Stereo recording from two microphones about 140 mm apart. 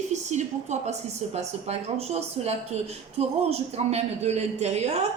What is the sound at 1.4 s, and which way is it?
A woman's voice, 50° right (ahead or behind).